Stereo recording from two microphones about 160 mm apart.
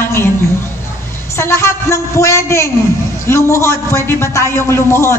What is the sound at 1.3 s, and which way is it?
A woman's voice, 15° left (ahead or behind).